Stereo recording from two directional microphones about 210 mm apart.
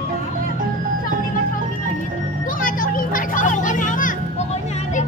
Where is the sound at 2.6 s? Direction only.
40° left (ahead or behind).